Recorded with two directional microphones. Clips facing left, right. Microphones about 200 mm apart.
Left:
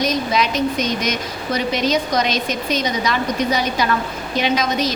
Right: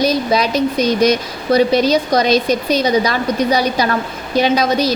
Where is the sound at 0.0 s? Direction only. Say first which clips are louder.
Right 4 dB; 35° right (ahead or behind).